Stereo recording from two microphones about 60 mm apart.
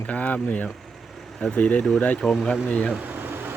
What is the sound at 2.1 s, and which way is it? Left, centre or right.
Speech, centre.